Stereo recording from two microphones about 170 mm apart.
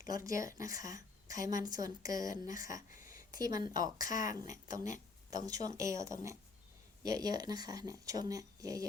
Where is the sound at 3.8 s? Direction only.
50° left (ahead or behind).